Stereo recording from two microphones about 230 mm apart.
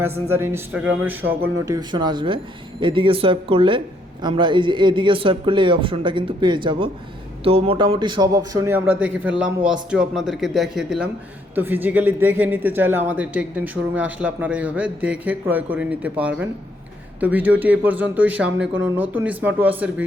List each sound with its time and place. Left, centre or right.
0.0 s a man's voice: centre